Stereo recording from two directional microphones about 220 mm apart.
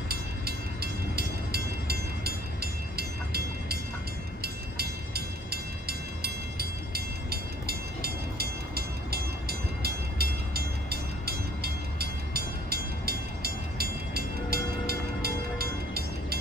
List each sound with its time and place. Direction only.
0.1 s train: 45° right (ahead or behind)